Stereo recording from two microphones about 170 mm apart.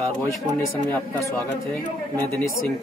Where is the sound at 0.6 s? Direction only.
15° left (ahead or behind).